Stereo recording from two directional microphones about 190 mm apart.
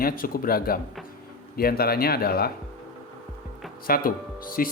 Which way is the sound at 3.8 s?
50° left (ahead or behind).